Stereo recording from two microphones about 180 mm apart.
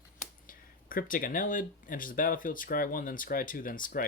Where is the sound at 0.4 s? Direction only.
50° left (ahead or behind).